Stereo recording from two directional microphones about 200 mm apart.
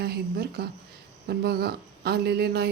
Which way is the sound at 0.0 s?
55° right (ahead or behind).